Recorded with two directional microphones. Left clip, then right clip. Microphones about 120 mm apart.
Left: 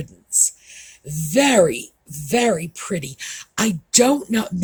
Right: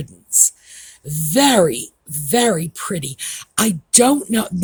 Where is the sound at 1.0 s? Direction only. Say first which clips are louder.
Right 2 dB; 45° right (ahead or behind).